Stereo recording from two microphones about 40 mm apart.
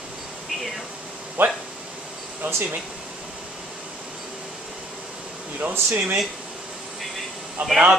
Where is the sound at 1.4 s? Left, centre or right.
Right.